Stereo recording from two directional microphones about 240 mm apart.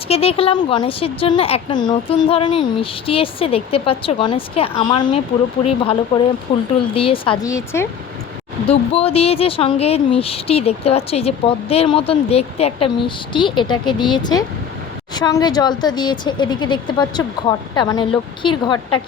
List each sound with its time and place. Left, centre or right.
0.1 s speech: left
8.6 s speech: left